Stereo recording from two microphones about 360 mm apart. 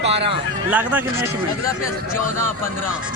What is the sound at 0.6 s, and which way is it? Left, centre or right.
Speech, centre.